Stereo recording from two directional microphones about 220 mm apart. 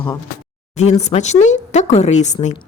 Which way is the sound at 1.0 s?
30° left (ahead or behind).